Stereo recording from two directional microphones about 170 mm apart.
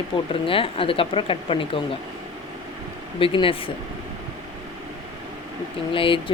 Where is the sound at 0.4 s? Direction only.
30° left (ahead or behind).